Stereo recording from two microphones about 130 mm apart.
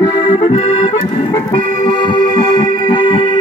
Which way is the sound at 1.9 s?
35° left (ahead or behind).